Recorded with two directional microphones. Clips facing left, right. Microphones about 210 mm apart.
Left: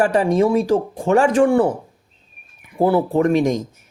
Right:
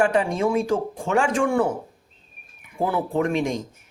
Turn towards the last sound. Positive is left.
turn(degrees=40)  # may be behind; listen again after turning